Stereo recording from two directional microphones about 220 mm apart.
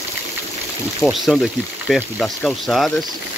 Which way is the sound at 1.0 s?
Centre (ahead or behind).